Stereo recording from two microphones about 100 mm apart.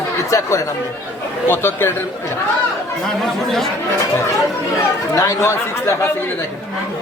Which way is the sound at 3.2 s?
5° left (ahead or behind).